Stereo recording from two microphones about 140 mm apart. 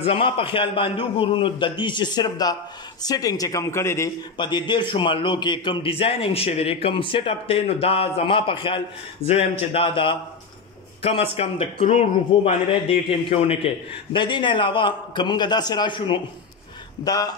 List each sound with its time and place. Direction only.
0.0 s a man's voice: 40° left (ahead or behind); by 4.1 s 20° left (ahead or behind)
4.4 s a man's voice: 35° left (ahead or behind)